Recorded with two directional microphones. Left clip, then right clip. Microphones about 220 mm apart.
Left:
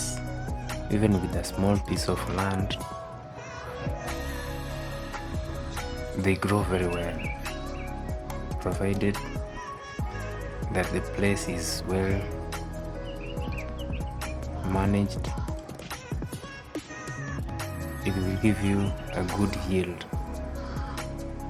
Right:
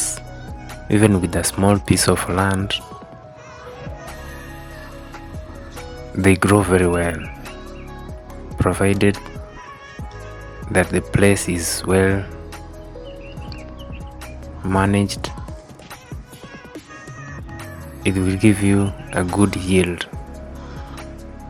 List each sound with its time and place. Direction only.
0.9 s speech: 30° right (ahead or behind)
6.2 s speech: 35° right (ahead or behind)
8.5 s speech: 35° right (ahead or behind)
10.7 s speech: 35° right (ahead or behind)
14.7 s speech: 30° right (ahead or behind)
18.0 s speech: 30° right (ahead or behind)